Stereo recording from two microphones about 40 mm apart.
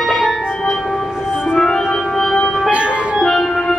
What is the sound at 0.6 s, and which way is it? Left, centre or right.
Music, centre.